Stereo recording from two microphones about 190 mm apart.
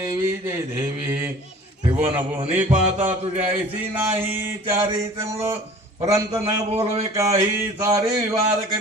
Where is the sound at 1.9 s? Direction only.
30° right (ahead or behind).